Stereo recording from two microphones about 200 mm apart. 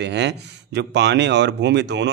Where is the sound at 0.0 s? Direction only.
60° right (ahead or behind).